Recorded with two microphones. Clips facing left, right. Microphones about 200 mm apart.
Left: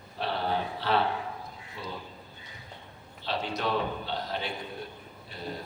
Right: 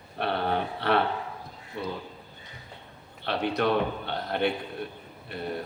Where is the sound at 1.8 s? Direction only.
60° right (ahead or behind).